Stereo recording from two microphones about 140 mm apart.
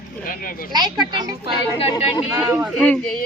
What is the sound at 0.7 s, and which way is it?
Speech, 30° right (ahead or behind).